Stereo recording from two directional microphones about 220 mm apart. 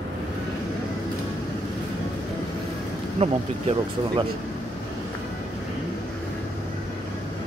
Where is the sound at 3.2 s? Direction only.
25° right (ahead or behind).